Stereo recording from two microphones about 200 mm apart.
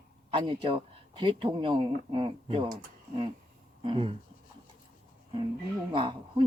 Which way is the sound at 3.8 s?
25° right (ahead or behind).